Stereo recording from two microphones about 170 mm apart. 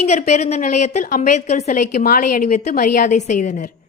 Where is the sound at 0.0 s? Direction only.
40° left (ahead or behind).